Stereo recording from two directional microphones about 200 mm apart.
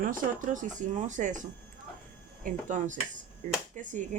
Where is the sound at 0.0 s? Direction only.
40° right (ahead or behind).